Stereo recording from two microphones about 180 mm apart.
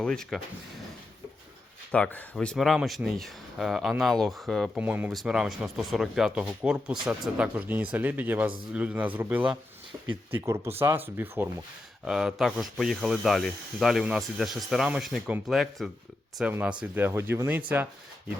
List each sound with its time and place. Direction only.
0.0 s speech: 5° left (ahead or behind)
1.9 s speech: 5° left (ahead or behind); by 17.6 s 10° right (ahead or behind)